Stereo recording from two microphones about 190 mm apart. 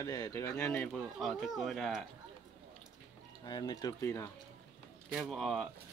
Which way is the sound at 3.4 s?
20° left (ahead or behind).